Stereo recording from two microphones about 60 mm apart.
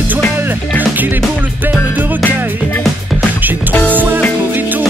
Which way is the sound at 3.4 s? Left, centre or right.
Right.